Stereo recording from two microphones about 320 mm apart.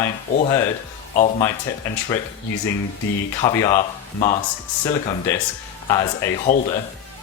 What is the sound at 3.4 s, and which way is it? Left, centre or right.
Speech, centre.